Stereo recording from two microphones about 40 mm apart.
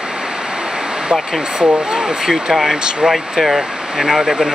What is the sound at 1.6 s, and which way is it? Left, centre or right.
Speech, right.